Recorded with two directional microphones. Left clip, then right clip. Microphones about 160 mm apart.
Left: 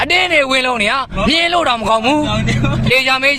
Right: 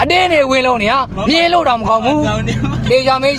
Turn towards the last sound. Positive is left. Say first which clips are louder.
# right 1 dB
turn(degrees=30)  # may be behind; listen again after turning